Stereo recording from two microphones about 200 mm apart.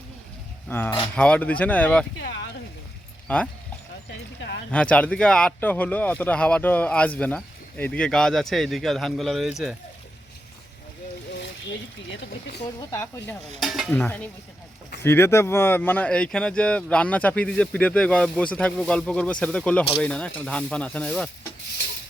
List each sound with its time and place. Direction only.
0.7 s speech: 10° left (ahead or behind)
2.1 s speech: 65° left (ahead or behind)
3.2 s speech: 5° left (ahead or behind)
4.7 s speech: 5° left (ahead or behind)
12.1 s speech: 55° left (ahead or behind)
12.9 s speech: 15° left (ahead or behind)
13.6 s speech: centre (ahead or behind)